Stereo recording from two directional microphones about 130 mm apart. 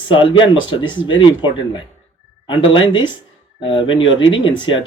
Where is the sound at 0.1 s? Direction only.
40° left (ahead or behind).